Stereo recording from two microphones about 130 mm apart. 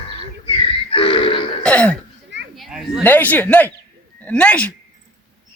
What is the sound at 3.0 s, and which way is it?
Speech, 15° left (ahead or behind).